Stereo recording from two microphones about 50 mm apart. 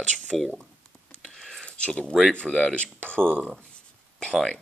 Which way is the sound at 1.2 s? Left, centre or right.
Centre.